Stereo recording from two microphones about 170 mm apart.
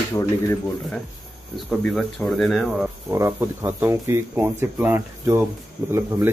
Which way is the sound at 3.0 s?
15° right (ahead or behind).